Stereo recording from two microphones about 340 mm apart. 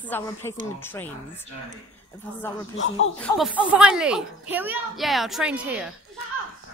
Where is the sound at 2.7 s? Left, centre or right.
Left.